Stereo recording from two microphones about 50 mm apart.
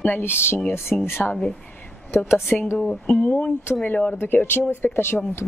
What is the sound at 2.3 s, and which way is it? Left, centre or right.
Speech, left.